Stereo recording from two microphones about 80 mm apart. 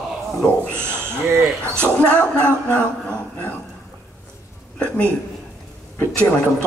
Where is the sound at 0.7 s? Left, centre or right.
Right.